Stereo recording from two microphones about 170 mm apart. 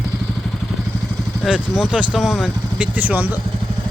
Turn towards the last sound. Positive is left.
turn(degrees=-10)  # may be behind; listen again after turning